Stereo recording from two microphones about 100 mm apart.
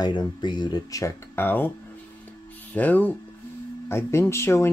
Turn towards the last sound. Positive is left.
turn(degrees=30)  # may be behind; listen again after turning